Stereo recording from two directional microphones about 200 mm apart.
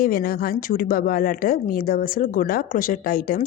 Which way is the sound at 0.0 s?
45° left (ahead or behind).